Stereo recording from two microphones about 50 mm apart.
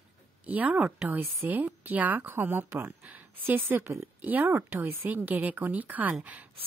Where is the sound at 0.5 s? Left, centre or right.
Right.